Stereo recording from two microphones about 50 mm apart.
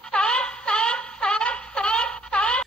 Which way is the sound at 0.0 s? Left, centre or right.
Centre.